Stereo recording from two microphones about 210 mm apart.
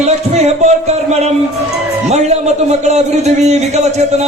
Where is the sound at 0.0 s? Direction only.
30° right (ahead or behind).